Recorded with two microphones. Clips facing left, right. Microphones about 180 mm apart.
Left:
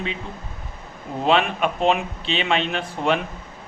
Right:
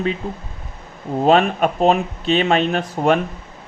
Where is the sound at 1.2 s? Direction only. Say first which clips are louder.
Right 5 dB; 45° right (ahead or behind).